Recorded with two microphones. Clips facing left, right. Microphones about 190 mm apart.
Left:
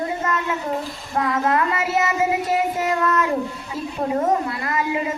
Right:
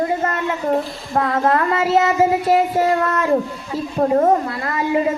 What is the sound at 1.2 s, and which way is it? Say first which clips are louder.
A woman's voice: right 3 dB; 30° right (ahead or behind).